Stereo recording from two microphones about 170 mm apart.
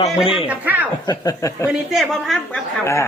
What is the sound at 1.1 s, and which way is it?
Speech, 20° left (ahead or behind).